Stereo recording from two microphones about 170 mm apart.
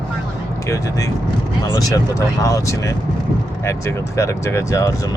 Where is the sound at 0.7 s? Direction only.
20° left (ahead or behind).